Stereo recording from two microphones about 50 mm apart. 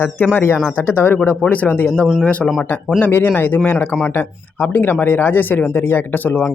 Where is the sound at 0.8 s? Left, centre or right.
Left.